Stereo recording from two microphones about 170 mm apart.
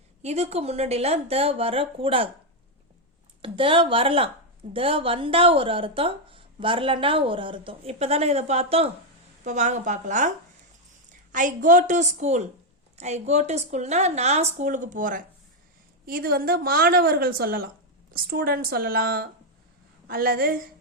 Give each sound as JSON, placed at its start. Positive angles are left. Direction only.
{"t": 0.2, "sound": "speech", "side_deg": -40}
{"t": 3.4, "sound": "a woman's voice", "side_deg": -30}
{"t": 16.0, "sound": "a woman's voice", "side_deg": -60}